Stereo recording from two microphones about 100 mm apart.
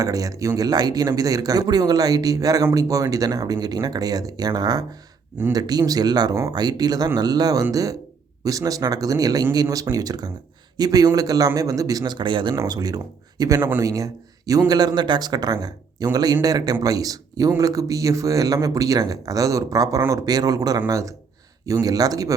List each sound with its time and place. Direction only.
0.0 s speech: 35° right (ahead or behind); by 12.5 s 50° right (ahead or behind)
12.6 s speech: 40° right (ahead or behind)
13.6 s speech: 20° right (ahead or behind)
13.8 s speech: 35° right (ahead or behind)